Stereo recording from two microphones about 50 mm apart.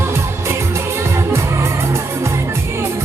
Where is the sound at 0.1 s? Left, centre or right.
Right.